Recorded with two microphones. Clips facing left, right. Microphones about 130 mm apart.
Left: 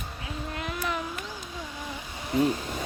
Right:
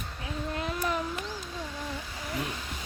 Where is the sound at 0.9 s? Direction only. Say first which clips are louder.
Right 1 dB; 35° right (ahead or behind).